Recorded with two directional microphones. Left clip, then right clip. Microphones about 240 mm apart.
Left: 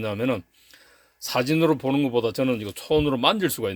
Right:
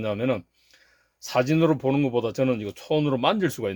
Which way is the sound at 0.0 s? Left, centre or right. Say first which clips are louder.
Even; centre.